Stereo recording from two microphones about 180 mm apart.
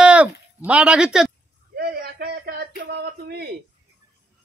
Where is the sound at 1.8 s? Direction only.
60° right (ahead or behind).